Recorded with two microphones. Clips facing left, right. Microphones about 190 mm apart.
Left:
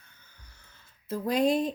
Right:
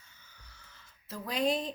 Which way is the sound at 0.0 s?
55° left (ahead or behind).